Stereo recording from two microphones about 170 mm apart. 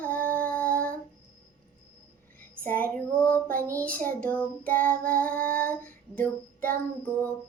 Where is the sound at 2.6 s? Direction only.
10° left (ahead or behind).